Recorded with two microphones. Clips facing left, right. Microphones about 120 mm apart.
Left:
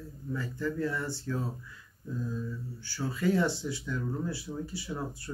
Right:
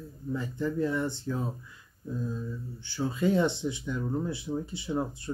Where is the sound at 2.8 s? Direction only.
20° right (ahead or behind).